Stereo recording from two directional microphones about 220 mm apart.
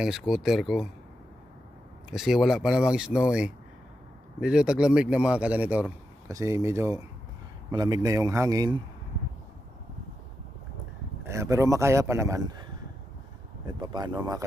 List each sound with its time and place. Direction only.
0.0 s a man's voice: centre (ahead or behind)
2.0 s a man's voice: centre (ahead or behind)
11.2 s a man's voice: 15° right (ahead or behind)
13.7 s speech: 20° right (ahead or behind)